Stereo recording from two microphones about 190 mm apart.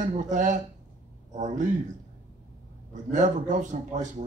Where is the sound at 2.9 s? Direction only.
40° right (ahead or behind).